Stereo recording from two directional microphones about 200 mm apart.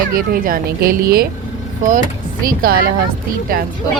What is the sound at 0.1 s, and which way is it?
Speech, 45° right (ahead or behind).